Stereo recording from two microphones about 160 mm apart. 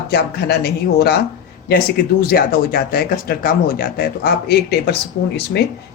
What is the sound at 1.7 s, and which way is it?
Speech, 75° left (ahead or behind).